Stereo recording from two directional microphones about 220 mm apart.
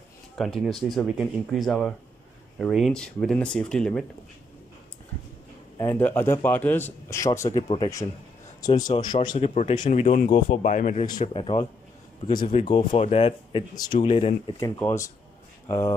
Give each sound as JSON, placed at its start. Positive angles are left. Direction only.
{"t": 0.7, "sound": "speech", "side_deg": 0}
{"t": 5.8, "sound": "a man's voice", "side_deg": 10}
{"t": 9.5, "sound": "speech", "side_deg": 30}
{"t": 14.6, "sound": "a man's voice", "side_deg": 10}